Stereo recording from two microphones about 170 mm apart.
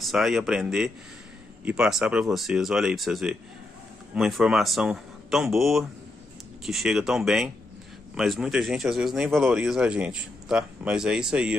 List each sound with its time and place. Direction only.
0.0 s speech: centre (ahead or behind)